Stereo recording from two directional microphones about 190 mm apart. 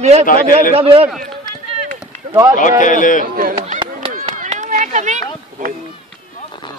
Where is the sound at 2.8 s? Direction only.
45° left (ahead or behind).